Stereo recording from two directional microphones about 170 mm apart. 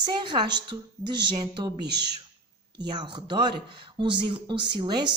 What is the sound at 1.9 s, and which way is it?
Speech, 80° right.